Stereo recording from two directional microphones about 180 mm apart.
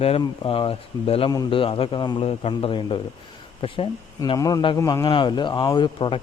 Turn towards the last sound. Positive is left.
turn(degrees=25)  # may be behind; listen again after turning